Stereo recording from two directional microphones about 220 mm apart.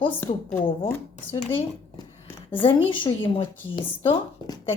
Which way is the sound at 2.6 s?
20° left (ahead or behind).